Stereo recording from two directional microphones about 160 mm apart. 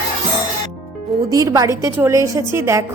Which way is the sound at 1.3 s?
20° right (ahead or behind).